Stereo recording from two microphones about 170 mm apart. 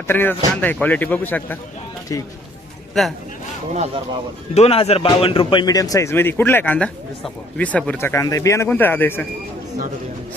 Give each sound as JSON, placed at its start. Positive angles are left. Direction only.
{"t": 0.1, "sound": "a man's voice", "side_deg": 10}
{"t": 3.0, "sound": "a man's voice", "side_deg": 0}
{"t": 4.5, "sound": "a man's voice", "side_deg": 35}